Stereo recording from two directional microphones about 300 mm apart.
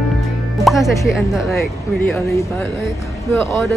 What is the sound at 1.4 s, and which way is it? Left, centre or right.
Speech, centre.